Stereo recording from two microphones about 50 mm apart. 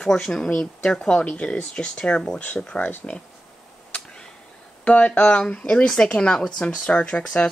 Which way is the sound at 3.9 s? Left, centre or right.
Centre.